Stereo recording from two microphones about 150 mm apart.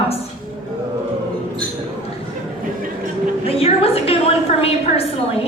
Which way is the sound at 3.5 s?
40° left (ahead or behind).